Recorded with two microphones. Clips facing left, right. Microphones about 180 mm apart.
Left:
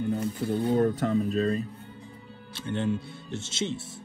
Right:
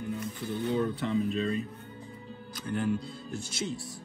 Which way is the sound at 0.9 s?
45° left (ahead or behind).